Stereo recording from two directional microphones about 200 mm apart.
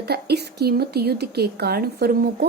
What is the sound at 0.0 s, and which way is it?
Speech, 55° right (ahead or behind).